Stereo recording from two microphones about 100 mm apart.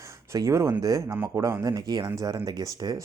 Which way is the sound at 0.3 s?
30° right (ahead or behind).